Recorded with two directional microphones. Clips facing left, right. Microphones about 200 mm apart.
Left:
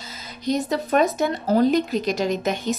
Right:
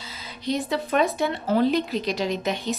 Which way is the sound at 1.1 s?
40° left (ahead or behind).